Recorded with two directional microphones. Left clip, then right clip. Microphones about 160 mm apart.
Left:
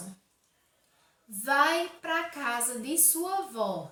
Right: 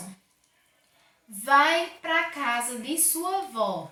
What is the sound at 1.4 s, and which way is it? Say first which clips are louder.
A woman's voice: right 5 dB; 25° left (ahead or behind).